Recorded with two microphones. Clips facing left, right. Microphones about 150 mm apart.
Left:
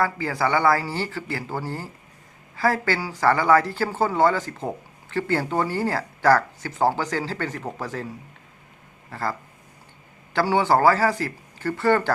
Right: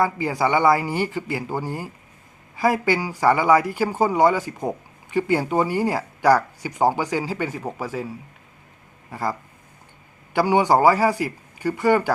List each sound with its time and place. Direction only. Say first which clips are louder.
0.0 s speech: right 2 dB; 15° right (ahead or behind)
9.0 s speech: right 2 dB; 15° right (ahead or behind)
10.3 s speech: right 2 dB; 15° right (ahead or behind)